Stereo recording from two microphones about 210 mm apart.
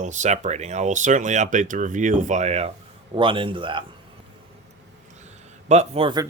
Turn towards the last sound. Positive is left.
turn(degrees=-25)  # may be behind; listen again after turning